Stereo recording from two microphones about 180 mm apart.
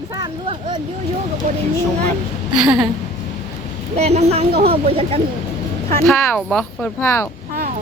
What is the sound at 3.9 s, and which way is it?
A woman's voice, 35° right (ahead or behind).